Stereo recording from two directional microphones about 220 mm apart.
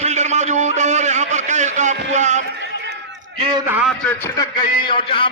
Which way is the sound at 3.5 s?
5° right (ahead or behind).